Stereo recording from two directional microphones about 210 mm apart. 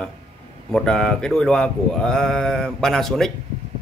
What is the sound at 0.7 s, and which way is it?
Speech, 5° left (ahead or behind).